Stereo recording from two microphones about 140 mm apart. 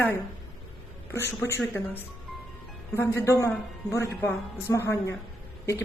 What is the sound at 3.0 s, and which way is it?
A woman's voice, 20° left (ahead or behind).